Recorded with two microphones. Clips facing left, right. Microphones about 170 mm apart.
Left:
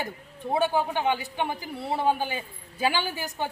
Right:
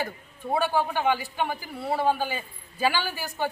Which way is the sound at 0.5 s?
20° left (ahead or behind).